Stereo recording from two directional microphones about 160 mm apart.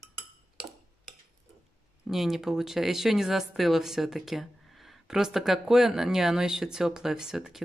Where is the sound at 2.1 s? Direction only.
Centre (ahead or behind).